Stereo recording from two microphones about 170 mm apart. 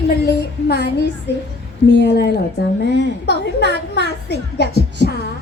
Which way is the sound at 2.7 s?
85° left.